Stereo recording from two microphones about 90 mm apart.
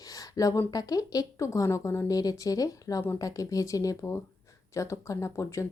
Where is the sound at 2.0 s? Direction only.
45° left (ahead or behind).